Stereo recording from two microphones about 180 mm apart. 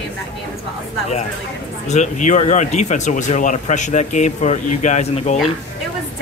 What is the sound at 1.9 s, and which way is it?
Speech, 40° left (ahead or behind).